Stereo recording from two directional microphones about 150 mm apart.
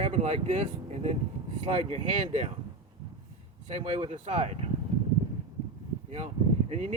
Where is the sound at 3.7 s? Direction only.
40° right (ahead or behind).